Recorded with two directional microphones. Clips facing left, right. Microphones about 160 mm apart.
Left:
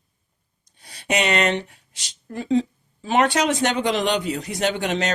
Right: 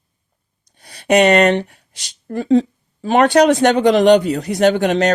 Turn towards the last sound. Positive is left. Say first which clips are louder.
# right 9 dB
turn(degrees=-55)  # may be behind; listen again after turning